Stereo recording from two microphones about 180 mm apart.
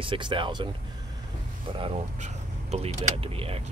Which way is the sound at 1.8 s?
35° right (ahead or behind).